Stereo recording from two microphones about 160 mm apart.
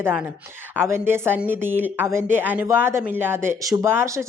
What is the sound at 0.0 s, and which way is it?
Speech, 10° right (ahead or behind).